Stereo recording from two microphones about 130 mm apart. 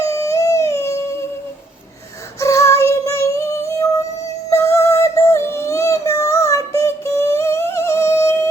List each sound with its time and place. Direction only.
0.0 s a sound: 25° left (ahead or behind)
2.4 s female singing: 25° left (ahead or behind)
4.4 s music: 20° left (ahead or behind)